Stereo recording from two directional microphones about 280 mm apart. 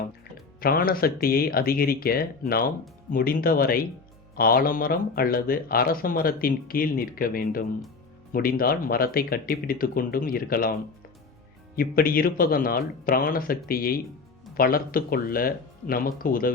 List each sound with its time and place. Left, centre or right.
0.6 s speech: left
11.8 s speech: left